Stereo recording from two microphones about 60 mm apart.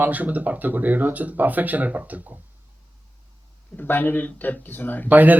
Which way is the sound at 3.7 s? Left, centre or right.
Left.